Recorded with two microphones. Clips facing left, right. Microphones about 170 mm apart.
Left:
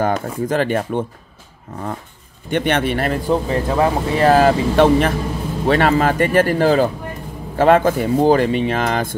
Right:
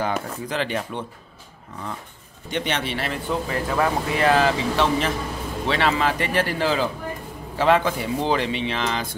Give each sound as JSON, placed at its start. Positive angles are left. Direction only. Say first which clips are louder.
{"t": 0.0, "sound": "speech", "louder": "left 7 dB", "side_deg": 50}
{"t": 2.5, "sound": "speech", "louder": "left 8 dB", "side_deg": 55}
{"t": 3.4, "sound": "speech", "louder": "left 6 dB", "side_deg": 30}